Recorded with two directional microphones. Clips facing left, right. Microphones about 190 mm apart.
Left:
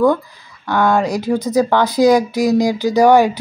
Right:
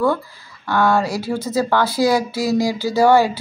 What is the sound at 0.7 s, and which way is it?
Speech, 20° left (ahead or behind).